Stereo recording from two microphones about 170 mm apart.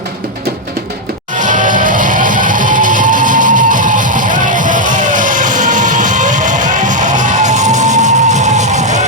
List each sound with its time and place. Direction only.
1.4 s music: 50° right (ahead or behind)